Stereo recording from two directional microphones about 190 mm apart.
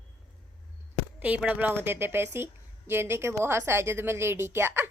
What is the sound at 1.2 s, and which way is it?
A woman's voice, 10° right (ahead or behind).